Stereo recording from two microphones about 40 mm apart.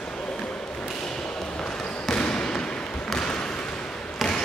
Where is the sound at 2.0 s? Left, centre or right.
Centre.